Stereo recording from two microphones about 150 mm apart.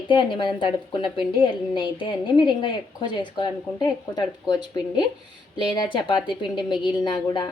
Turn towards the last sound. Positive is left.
turn(degrees=30)  # may be behind; listen again after turning